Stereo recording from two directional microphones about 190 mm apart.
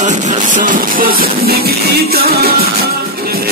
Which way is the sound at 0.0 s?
40° right (ahead or behind).